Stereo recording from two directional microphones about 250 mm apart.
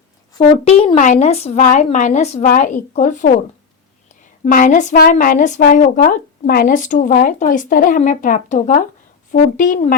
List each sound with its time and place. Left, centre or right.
0.3 s speech: left
4.4 s speech: left